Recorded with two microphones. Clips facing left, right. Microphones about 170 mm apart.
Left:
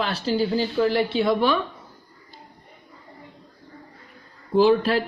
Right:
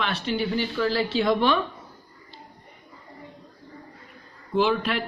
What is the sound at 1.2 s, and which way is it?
Speech, 5° left (ahead or behind).